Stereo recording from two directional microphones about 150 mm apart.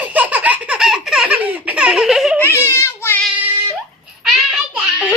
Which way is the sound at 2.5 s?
15° left (ahead or behind).